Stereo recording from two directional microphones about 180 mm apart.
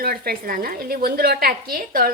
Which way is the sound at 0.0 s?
55° right (ahead or behind).